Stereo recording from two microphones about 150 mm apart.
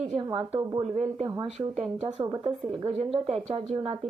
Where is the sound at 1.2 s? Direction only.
25° right (ahead or behind).